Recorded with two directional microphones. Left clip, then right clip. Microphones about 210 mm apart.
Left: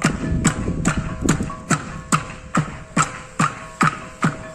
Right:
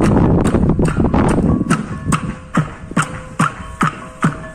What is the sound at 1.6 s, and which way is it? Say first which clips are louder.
Music: right 3 dB; centre (ahead or behind).